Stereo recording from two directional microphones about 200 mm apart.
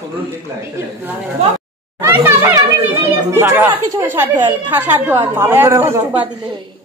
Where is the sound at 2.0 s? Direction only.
10° right (ahead or behind).